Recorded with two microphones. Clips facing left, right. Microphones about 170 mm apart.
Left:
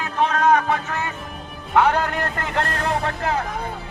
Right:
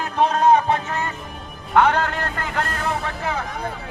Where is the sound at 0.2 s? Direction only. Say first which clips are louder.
Right 2 dB; 35° right (ahead or behind).